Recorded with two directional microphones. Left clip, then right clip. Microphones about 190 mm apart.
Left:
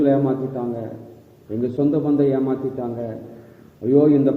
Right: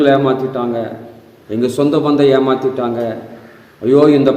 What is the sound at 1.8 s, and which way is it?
Speech, 20° right (ahead or behind).